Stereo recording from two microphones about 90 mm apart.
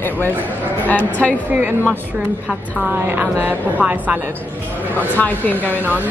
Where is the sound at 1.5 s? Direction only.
20° right (ahead or behind).